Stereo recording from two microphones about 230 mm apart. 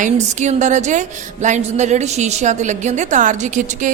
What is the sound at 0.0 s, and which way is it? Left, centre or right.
A woman's voice, right.